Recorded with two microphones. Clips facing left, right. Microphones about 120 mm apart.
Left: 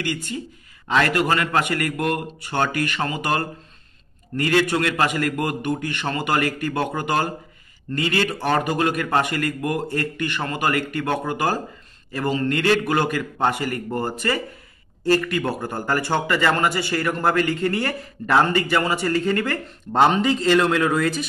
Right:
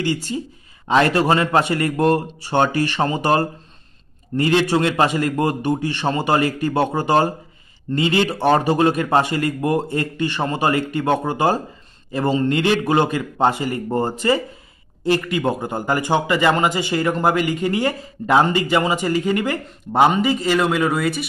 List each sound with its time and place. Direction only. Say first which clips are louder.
0.0 s a man's voice: right 5 dB; 25° right (ahead or behind); by 21.3 s 5° right (ahead or behind)